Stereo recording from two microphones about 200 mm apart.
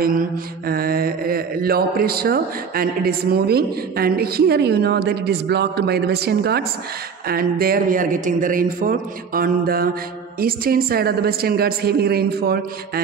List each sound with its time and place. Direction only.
0.7 s speech: 45° right (ahead or behind)